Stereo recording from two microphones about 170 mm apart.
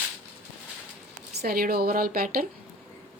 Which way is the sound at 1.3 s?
65° right (ahead or behind).